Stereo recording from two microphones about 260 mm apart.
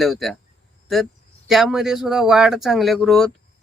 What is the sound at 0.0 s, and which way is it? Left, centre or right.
Speech, centre.